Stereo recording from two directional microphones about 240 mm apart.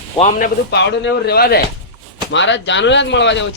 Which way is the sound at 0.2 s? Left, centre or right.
Left.